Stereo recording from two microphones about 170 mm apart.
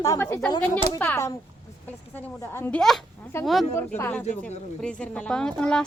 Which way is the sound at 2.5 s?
15° left (ahead or behind).